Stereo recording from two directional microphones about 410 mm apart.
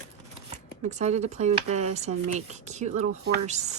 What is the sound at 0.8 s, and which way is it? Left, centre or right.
Speech, centre.